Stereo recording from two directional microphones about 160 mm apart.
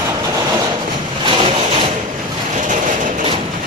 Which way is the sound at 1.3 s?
35° right (ahead or behind).